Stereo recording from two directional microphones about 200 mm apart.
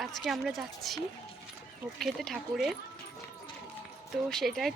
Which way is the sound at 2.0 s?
Centre (ahead or behind).